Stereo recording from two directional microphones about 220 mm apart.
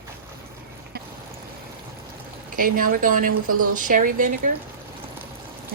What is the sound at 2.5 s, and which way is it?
Speech, 40° right (ahead or behind).